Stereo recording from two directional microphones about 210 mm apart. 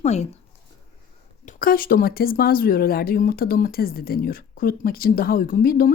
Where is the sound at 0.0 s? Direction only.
30° left (ahead or behind).